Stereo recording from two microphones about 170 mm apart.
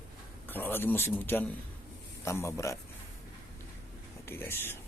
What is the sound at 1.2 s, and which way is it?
A man's voice, 10° left (ahead or behind).